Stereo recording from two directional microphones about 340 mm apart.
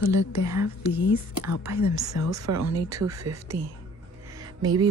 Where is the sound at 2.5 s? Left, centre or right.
Right.